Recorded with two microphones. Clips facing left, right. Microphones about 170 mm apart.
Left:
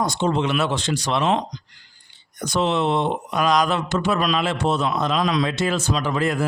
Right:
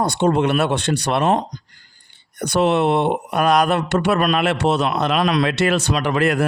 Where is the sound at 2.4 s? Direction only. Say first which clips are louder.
Right 4 dB; 65° right (ahead or behind).